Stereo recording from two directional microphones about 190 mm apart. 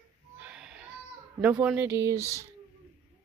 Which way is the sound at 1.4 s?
5° right (ahead or behind).